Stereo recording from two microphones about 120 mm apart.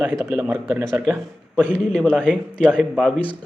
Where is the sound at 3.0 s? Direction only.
10° left (ahead or behind).